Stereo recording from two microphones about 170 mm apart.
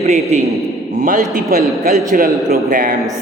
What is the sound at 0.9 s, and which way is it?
Speech, 50° right (ahead or behind).